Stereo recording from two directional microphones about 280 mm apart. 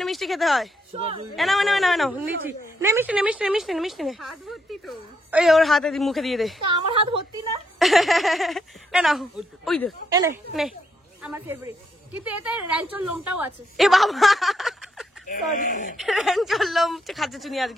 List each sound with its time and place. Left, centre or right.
0.0 s speech: centre
0.9 s a woman's voice: centre
1.3 s a woman's voice: centre
6.7 s a woman's voice: centre
7.8 s a woman's voice: centre
10.1 s a woman's voice: centre
15.2 s speech: left
16.0 s a woman's voice: centre